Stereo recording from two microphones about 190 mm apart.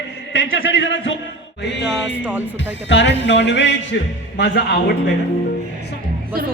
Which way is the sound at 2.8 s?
70° left (ahead or behind).